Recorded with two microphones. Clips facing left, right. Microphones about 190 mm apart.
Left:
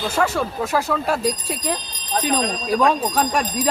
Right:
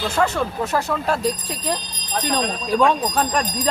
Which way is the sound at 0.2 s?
10° left (ahead or behind).